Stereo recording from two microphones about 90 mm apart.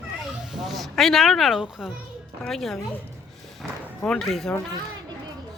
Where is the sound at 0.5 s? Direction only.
Centre (ahead or behind).